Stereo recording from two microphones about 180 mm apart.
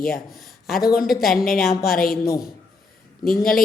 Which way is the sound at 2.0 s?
55° left (ahead or behind).